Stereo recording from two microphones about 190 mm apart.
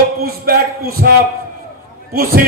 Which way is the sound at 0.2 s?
50° right (ahead or behind).